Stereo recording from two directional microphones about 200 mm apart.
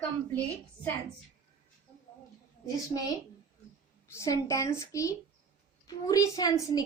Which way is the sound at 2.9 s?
20° left (ahead or behind).